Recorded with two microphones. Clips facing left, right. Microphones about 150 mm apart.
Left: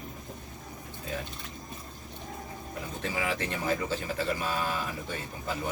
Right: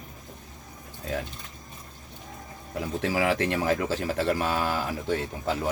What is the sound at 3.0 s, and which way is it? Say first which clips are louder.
Speech: right 7 dB; 75° right (ahead or behind).